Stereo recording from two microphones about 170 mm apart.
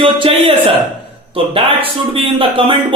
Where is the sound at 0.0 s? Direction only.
30° right (ahead or behind).